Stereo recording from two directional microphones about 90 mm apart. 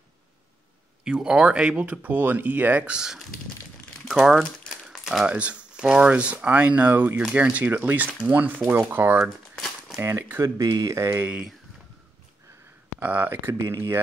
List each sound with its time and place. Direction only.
1.0 s speech: 10° right (ahead or behind)
4.8 s crumpling: 5° right (ahead or behind)
5.3 s speech: 15° right (ahead or behind)
10.4 s speech: 40° right (ahead or behind)
11.2 s speech: 10° right (ahead or behind)
13.0 s speech: 20° right (ahead or behind)
13.7 s speech: 30° right (ahead or behind)